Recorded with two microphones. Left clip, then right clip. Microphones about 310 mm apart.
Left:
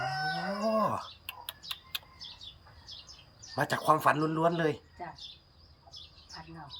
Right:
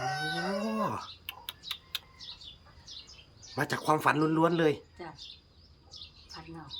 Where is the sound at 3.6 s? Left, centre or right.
Centre.